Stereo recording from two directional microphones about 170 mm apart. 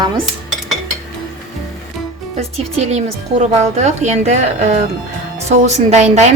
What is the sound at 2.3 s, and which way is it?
A woman's voice, 40° right (ahead or behind).